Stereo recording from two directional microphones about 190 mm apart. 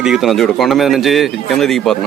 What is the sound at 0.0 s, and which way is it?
A man's voice, centre (ahead or behind).